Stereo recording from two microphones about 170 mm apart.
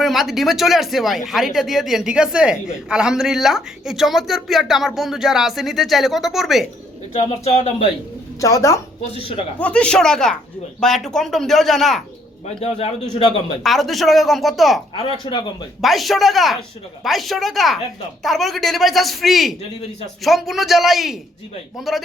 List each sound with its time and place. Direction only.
0.0 s speech: centre (ahead or behind)
7.1 s a man's voice: 40° left (ahead or behind)
8.4 s speech: 20° left (ahead or behind)
9.6 s speech: 5° left (ahead or behind)
12.5 s a man's voice: 35° left (ahead or behind)
13.6 s speech: centre (ahead or behind)
14.9 s speech: 30° left (ahead or behind)
15.8 s speech: centre (ahead or behind)